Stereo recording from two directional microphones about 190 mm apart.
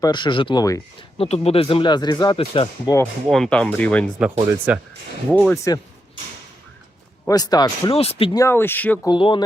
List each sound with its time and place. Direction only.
0.0 s speech: 25° left (ahead or behind)
1.2 s speech: 30° left (ahead or behind)
2.9 s speech: 5° left (ahead or behind)
4.2 s speech: 5° right (ahead or behind)
5.7 s speech: 20° left (ahead or behind)
7.3 s speech: 20° left (ahead or behind)
8.4 s speech: 15° left (ahead or behind)
9.0 s speech: 25° left (ahead or behind)